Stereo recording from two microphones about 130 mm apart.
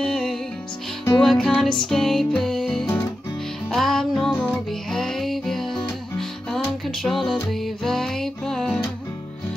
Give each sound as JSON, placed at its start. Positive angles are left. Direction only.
{"t": 0.0, "sound": "music", "side_deg": 5}
{"t": 4.3, "sound": "music", "side_deg": 15}
{"t": 4.6, "sound": "music", "side_deg": 5}